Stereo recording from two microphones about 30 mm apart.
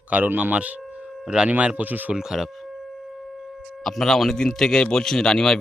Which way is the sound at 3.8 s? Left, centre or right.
Centre.